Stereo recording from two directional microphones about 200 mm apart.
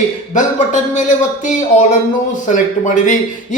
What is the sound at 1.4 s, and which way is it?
A man's voice, 40° left (ahead or behind).